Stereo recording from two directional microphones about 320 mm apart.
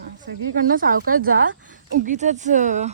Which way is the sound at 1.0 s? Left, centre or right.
Right.